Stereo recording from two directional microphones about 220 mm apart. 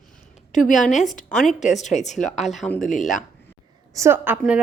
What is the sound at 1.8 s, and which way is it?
Speech, 30° left (ahead or behind).